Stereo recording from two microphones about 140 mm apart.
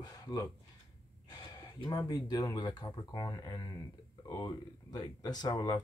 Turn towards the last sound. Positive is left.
turn(degrees=30)  # may be behind; listen again after turning